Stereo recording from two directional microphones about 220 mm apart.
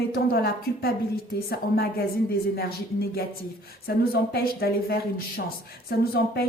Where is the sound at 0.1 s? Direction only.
45° left (ahead or behind).